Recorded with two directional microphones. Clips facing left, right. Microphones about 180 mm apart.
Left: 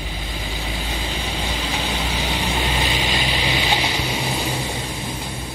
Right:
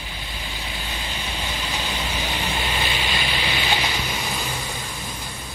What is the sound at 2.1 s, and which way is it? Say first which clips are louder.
Vehicle: left 3 dB; 15° left (ahead or behind).